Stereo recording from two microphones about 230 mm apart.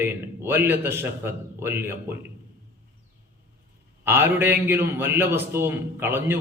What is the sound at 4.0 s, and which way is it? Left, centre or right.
A man's voice, centre.